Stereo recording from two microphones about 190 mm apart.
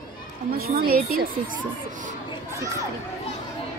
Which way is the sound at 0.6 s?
50° right (ahead or behind).